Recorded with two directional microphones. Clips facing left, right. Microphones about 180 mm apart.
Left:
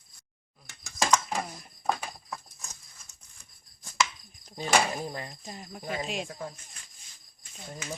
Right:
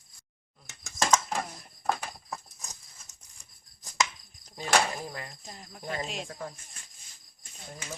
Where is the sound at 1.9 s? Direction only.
Centre (ahead or behind).